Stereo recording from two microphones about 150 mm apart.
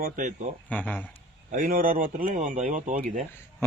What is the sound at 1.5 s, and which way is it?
Speech, 70° right (ahead or behind).